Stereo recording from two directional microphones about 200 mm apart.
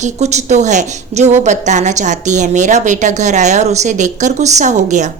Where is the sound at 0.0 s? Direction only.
35° right (ahead or behind).